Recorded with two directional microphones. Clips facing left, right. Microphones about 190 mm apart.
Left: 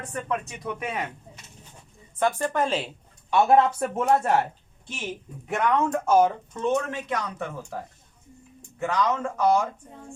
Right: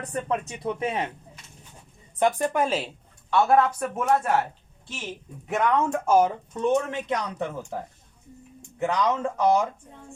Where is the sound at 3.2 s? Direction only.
20° left (ahead or behind).